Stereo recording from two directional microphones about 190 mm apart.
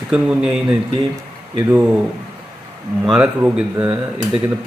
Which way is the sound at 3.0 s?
5° right (ahead or behind).